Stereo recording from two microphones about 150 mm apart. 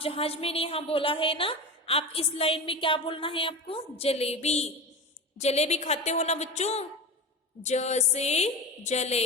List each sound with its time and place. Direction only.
0.0 s a woman's voice: 40° left (ahead or behind)